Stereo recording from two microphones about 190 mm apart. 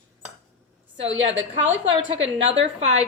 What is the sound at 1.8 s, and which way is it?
Speech, 30° right (ahead or behind).